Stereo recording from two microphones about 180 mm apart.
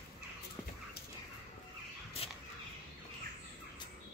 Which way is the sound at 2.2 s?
35° left (ahead or behind).